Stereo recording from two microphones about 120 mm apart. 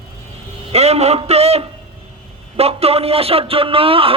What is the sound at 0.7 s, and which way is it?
A man's voice, 60° right (ahead or behind).